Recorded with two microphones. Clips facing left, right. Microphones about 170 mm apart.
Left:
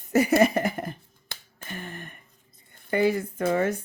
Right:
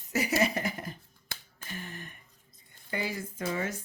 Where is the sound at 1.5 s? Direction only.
55° left (ahead or behind).